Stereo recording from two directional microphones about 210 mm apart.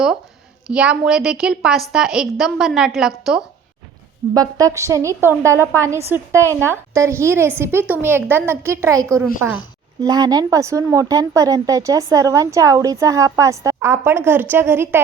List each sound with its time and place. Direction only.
0.7 s a woman's voice: 5° right (ahead or behind)
4.4 s speech: 15° right (ahead or behind)